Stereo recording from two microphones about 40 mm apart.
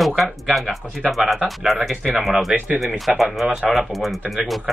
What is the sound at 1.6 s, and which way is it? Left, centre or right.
A man's voice, centre.